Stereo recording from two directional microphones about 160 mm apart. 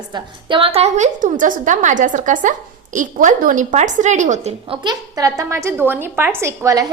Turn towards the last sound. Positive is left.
turn(degrees=-20)  # may be behind; listen again after turning